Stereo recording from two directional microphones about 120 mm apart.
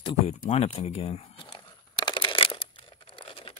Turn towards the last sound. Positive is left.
turn(degrees=50)  # may be behind; listen again after turning